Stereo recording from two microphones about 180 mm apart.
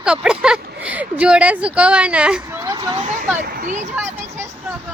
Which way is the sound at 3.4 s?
50° right (ahead or behind).